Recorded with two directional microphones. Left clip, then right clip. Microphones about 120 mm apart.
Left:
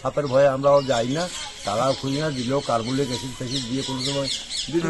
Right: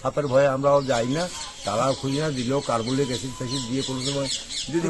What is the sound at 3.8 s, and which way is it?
Speech, 15° right (ahead or behind).